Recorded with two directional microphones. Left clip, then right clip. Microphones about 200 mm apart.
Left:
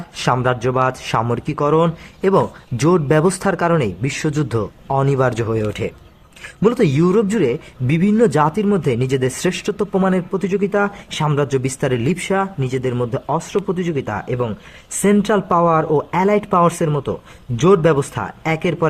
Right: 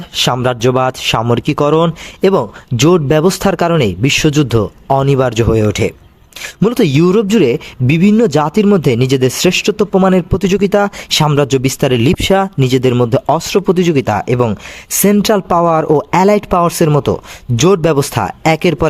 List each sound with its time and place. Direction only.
0.2 s speech: 35° right (ahead or behind)
11.3 s speech: 40° right (ahead or behind)